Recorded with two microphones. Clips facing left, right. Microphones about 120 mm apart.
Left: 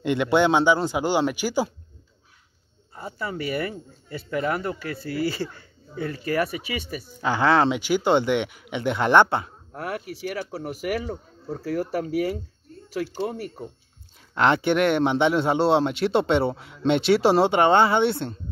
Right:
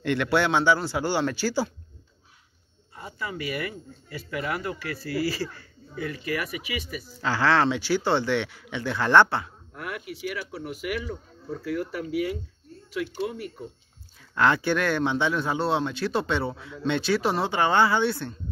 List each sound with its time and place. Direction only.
0.0 s speech: 20° left (ahead or behind)
2.9 s speech: 35° left (ahead or behind)
7.2 s speech: 20° left (ahead or behind)
9.7 s speech: 35° left (ahead or behind)
14.3 s a man's voice: 20° left (ahead or behind)